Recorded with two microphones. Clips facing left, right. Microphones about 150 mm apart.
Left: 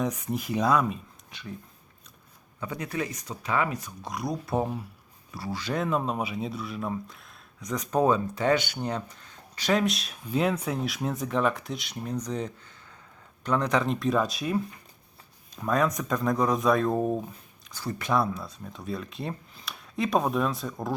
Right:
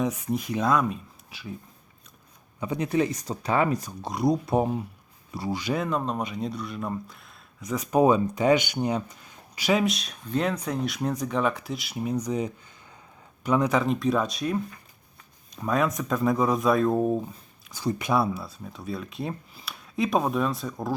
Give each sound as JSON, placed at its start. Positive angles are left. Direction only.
{"t": 0.0, "sound": "speech", "side_deg": 0}
{"t": 2.6, "sound": "speech", "side_deg": -20}
{"t": 5.7, "sound": "speech", "side_deg": 0}
{"t": 17.7, "sound": "speech", "side_deg": -15}